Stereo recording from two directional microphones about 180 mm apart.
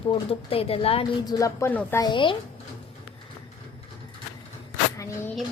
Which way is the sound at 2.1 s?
25° left (ahead or behind).